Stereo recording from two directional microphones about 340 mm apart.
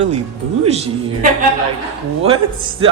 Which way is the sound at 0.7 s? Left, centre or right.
Centre.